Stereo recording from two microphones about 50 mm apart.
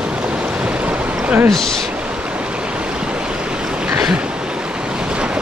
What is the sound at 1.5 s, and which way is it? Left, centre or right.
Speech, centre.